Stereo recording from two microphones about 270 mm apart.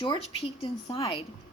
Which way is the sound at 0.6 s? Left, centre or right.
Centre.